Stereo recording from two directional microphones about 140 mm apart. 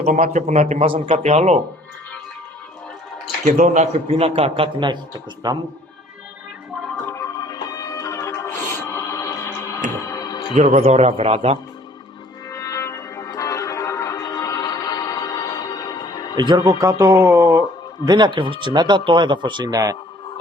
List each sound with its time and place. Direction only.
0.0 s a man's voice: 60° right (ahead or behind)
1.1 s a man's voice: 50° right (ahead or behind)
3.4 s a man's voice: 55° right (ahead or behind)
4.1 s speech: 45° right (ahead or behind)
7.3 s music: 25° left (ahead or behind)
10.5 s a man's voice: 50° right (ahead or behind)
12.5 s music: 25° left (ahead or behind)
16.4 s a man's voice: 30° right (ahead or behind)
18.0 s a man's voice: 30° right (ahead or behind)